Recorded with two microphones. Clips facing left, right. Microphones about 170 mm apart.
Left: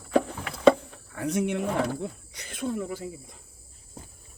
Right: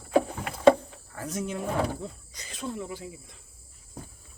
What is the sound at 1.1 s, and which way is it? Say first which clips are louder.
Speech: left 6 dB; 65° left (ahead or behind).